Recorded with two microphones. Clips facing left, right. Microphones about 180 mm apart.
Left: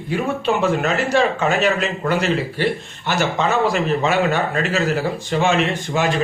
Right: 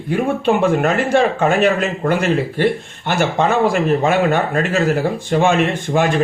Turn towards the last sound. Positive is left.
turn(degrees=-55)  # may be behind; listen again after turning